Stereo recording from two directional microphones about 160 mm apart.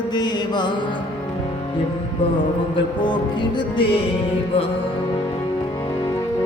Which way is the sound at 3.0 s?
30° left (ahead or behind).